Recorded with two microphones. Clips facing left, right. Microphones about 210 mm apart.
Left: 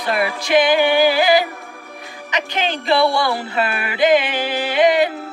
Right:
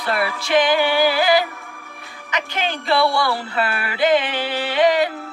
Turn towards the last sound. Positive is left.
turn(degrees=15)  # may be behind; listen again after turning